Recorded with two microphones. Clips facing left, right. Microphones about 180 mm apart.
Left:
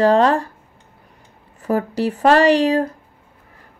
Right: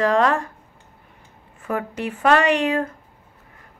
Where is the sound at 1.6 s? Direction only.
35° left (ahead or behind).